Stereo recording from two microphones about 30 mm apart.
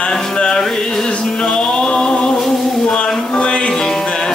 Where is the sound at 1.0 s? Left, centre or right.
Left.